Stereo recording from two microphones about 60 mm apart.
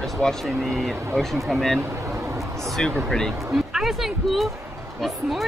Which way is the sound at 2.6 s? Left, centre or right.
Centre.